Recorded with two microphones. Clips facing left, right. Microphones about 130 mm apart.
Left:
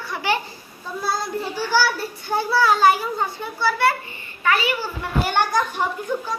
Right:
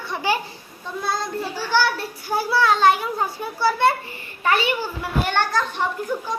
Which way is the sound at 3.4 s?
15° right (ahead or behind).